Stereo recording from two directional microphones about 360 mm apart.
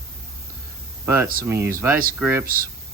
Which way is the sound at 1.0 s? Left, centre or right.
Centre.